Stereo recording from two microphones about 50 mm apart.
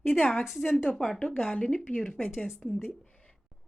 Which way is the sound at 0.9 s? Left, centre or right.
Centre.